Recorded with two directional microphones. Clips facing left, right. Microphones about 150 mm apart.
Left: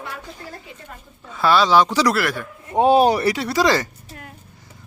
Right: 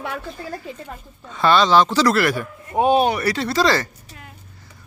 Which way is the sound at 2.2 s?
Centre (ahead or behind).